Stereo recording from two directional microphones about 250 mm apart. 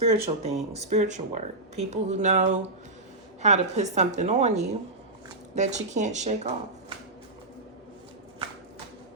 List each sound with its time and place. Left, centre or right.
0.0 s speech: right